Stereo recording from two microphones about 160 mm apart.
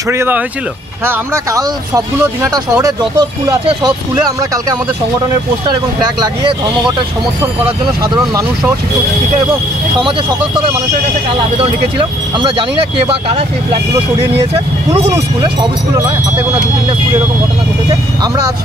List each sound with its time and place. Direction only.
0.1 s speech: 15° right (ahead or behind)
7.6 s speech: 25° right (ahead or behind)
11.5 s speech: 35° right (ahead or behind)